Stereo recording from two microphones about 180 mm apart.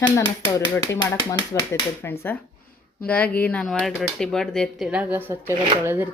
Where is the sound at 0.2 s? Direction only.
20° left (ahead or behind).